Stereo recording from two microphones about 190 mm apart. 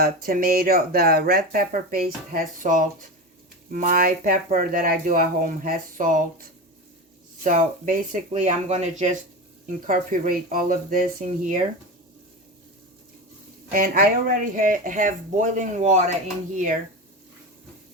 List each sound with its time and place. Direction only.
0.0 s speech: 50° right (ahead or behind)
13.7 s speech: 50° right (ahead or behind)